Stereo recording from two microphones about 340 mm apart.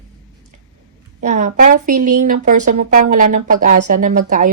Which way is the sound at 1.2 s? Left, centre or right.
Right.